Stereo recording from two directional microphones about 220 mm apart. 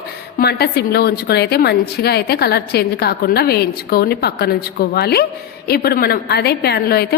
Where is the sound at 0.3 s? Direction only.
45° left (ahead or behind).